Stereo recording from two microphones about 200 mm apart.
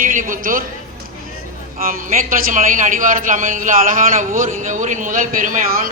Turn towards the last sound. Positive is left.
turn(degrees=-45)  # may be behind; listen again after turning